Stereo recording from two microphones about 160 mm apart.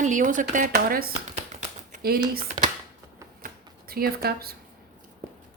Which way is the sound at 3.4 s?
65° right (ahead or behind).